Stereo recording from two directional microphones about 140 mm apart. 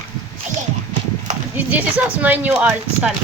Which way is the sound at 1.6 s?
10° right (ahead or behind).